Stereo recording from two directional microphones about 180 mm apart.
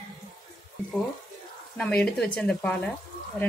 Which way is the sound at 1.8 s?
5° left (ahead or behind).